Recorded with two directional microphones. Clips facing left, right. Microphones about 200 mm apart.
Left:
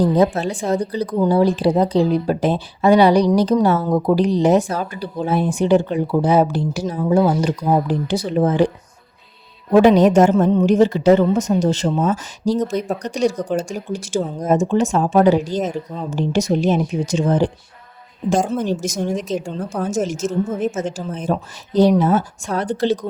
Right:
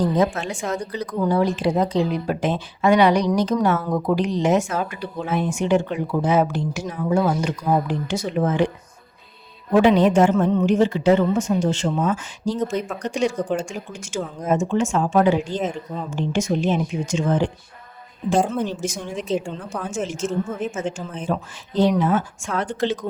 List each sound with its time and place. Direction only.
0.0 s a woman's voice: 35° left (ahead or behind)
9.7 s a woman's voice: 40° left (ahead or behind)
18.3 s a woman's voice: centre (ahead or behind)
18.8 s a woman's voice: 40° left (ahead or behind)